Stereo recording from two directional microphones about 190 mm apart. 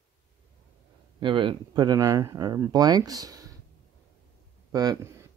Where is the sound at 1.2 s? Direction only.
25° right (ahead or behind).